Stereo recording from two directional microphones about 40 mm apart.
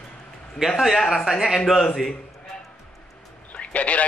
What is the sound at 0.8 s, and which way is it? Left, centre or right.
Speech, centre.